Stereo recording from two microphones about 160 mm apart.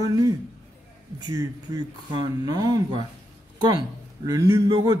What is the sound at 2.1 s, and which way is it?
Speech, 25° right (ahead or behind).